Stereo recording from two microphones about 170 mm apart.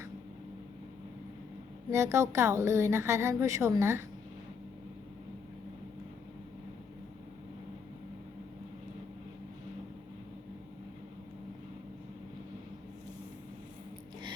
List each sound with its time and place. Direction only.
1.9 s a woman's voice: 15° right (ahead or behind)